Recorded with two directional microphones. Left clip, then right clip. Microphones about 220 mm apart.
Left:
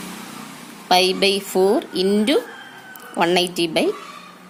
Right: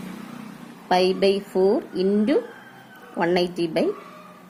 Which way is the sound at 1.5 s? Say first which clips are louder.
Left 4 dB; 45° left (ahead or behind).